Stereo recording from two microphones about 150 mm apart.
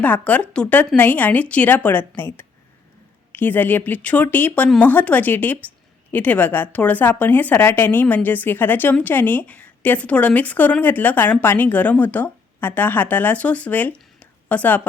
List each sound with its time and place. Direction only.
0.0 s speech: 10° left (ahead or behind)